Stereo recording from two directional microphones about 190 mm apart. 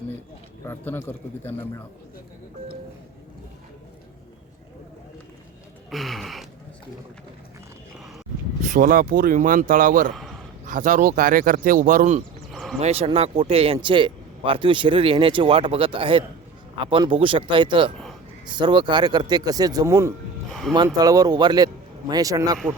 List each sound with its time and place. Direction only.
0.6 s a man's voice: 15° left (ahead or behind)
5.9 s a sound: centre (ahead or behind)
8.6 s speech: 45° right (ahead or behind)
10.1 s a man's voice: centre (ahead or behind)
10.7 s speech: 45° right (ahead or behind)
12.5 s a sound: centre (ahead or behind)
12.8 s speech: 35° right (ahead or behind)
17.9 s a sound: centre (ahead or behind)
18.4 s speech: 25° right (ahead or behind)
20.5 s speech: centre (ahead or behind)
20.7 s speech: 20° right (ahead or behind)